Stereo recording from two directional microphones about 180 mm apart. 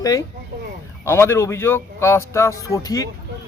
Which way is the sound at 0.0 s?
20° left (ahead or behind).